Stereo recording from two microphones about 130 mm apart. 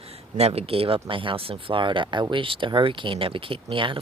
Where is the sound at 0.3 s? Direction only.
50° right (ahead or behind).